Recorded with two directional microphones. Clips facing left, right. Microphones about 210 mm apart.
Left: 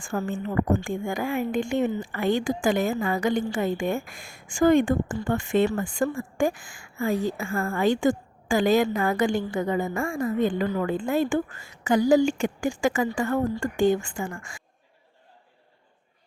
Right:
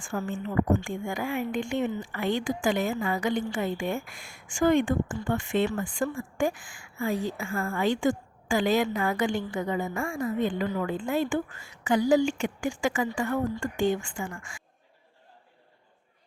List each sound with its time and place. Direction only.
0.0 s a woman's voice: 45° left (ahead or behind)